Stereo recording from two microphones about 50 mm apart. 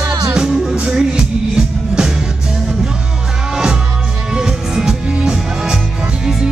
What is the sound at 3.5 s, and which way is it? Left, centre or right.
Music, centre.